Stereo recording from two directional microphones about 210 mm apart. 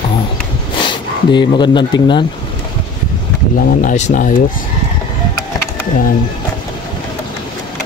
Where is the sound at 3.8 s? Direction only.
35° left (ahead or behind).